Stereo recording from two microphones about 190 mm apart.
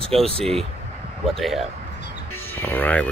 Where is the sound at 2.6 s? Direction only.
10° left (ahead or behind).